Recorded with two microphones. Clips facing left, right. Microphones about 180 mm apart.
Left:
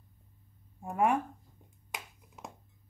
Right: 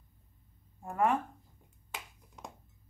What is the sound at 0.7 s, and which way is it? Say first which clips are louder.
Speech: left 1 dB; 15° left (ahead or behind).